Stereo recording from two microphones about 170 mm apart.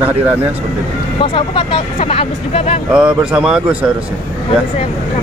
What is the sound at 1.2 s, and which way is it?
Speech, 30° left (ahead or behind).